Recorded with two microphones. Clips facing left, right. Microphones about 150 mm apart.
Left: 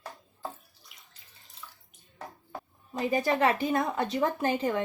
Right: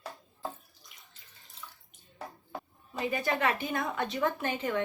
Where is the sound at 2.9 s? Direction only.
35° left (ahead or behind).